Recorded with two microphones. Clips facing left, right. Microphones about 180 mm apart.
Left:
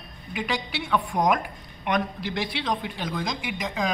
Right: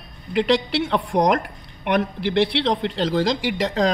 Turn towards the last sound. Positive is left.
turn(degrees=-75)  # may be behind; listen again after turning